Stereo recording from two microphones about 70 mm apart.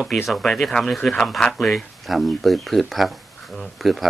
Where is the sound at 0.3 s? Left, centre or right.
Centre.